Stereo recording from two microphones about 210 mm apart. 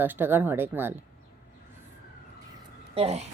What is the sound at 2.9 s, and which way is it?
Speech, 30° right (ahead or behind).